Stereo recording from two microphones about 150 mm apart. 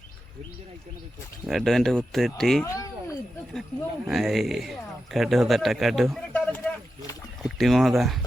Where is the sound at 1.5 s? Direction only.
Centre (ahead or behind).